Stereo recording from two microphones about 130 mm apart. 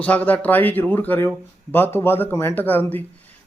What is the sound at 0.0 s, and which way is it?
A man's voice, 10° left (ahead or behind).